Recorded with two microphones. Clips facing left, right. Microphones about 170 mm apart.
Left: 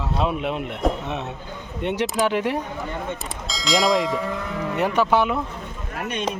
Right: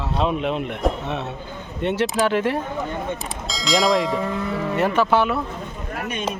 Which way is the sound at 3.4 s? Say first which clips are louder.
Right 1 dB; centre (ahead or behind).